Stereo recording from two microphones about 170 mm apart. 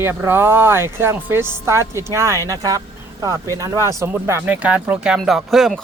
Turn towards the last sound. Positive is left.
turn(degrees=0)  # may be behind; listen again after turning